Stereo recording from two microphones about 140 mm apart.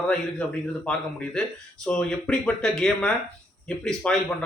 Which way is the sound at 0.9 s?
5° left (ahead or behind).